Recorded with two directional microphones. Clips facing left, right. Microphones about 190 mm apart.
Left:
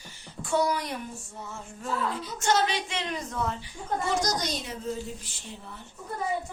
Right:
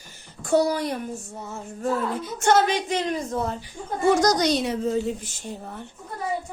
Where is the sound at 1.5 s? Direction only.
40° right (ahead or behind).